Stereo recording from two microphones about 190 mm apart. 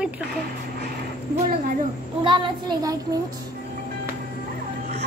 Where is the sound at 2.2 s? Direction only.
25° right (ahead or behind).